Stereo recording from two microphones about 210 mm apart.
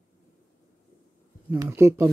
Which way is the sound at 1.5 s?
10° right (ahead or behind).